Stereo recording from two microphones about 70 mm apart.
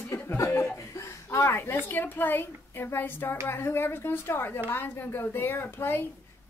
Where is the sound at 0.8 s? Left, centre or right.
Left.